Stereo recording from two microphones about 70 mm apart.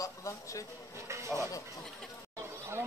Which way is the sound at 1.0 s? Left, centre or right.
Right.